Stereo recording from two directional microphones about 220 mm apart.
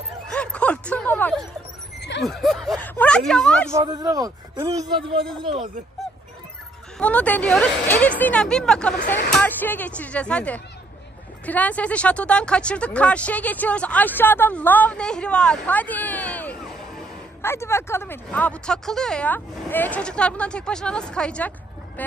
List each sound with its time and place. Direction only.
0.3 s a sound: 5° left (ahead or behind)
2.0 s neigh: 50° left (ahead or behind)
2.2 s speech: centre (ahead or behind)
3.7 s speech: 15° right (ahead or behind)
7.0 s speech: 5° left (ahead or behind)